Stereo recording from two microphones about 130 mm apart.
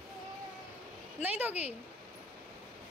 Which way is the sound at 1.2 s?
10° right (ahead or behind).